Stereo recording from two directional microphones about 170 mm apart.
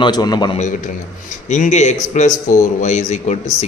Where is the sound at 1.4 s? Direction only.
45° left (ahead or behind).